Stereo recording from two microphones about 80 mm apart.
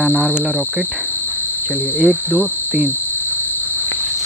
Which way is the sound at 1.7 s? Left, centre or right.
Left.